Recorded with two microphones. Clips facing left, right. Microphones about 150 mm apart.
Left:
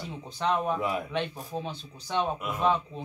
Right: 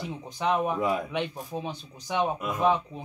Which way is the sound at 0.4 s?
15° right (ahead or behind).